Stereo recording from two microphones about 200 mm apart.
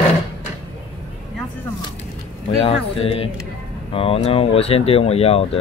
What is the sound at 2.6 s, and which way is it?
Speech, 30° left (ahead or behind).